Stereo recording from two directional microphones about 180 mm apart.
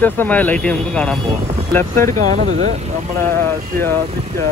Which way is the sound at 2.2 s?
40° right (ahead or behind).